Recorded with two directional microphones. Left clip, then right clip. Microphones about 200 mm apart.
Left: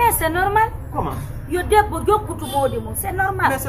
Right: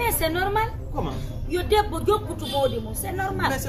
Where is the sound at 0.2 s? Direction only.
20° right (ahead or behind).